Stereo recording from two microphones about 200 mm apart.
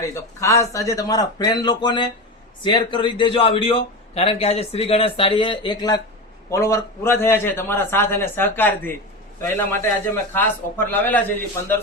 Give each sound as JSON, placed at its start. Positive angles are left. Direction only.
{"t": 0.2, "sound": "a man's voice", "side_deg": 15}